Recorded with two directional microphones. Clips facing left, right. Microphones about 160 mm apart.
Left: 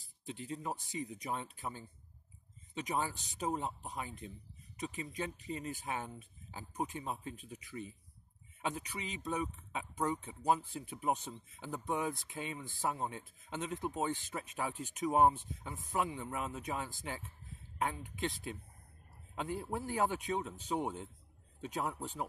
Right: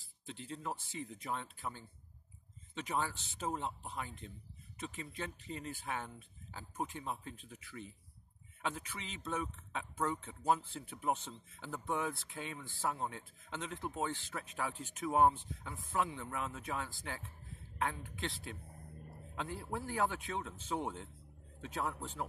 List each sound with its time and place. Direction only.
0.3 s speech: 15° left (ahead or behind)